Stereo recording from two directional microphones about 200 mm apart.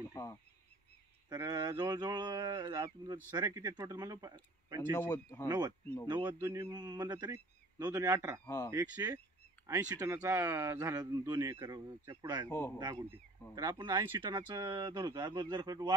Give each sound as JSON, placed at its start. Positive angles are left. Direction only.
{"t": 0.1, "sound": "honk", "side_deg": 15}
{"t": 1.3, "sound": "speech", "side_deg": -20}
{"t": 4.9, "sound": "speech", "side_deg": 15}
{"t": 5.5, "sound": "speech", "side_deg": -20}
{"t": 12.4, "sound": "speech", "side_deg": 10}
{"t": 12.7, "sound": "speech", "side_deg": -20}